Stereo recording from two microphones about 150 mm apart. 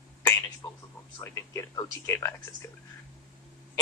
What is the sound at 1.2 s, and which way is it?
Speech, 20° left (ahead or behind).